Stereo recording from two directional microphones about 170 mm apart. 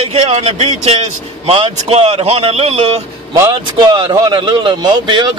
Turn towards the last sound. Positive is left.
turn(degrees=-25)  # may be behind; listen again after turning